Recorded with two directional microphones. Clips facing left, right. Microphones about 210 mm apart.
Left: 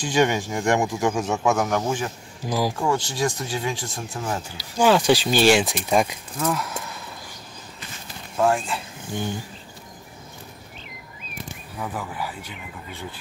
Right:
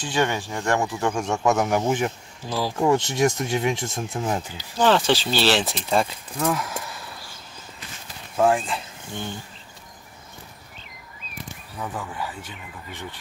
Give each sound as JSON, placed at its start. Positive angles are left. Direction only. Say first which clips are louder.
{"t": 0.0, "sound": "speech", "louder": "left 3 dB", "side_deg": 15}
{"t": 2.4, "sound": "speech", "louder": "left 3 dB", "side_deg": 15}
{"t": 2.8, "sound": "speech", "louder": "right 4 dB", "side_deg": -20}
{"t": 4.7, "sound": "speech", "louder": "left 2 dB", "side_deg": 10}
{"t": 6.4, "sound": "speech", "louder": "right 1 dB", "side_deg": -5}
{"t": 8.4, "sound": "speech", "louder": "right 1 dB", "side_deg": -5}
{"t": 9.1, "sound": "speech", "louder": "left 4 dB", "side_deg": 10}
{"t": 11.8, "sound": "speech", "louder": "left 1 dB", "side_deg": 5}